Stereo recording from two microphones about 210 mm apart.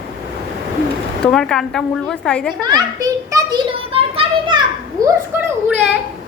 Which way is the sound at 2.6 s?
20° right (ahead or behind).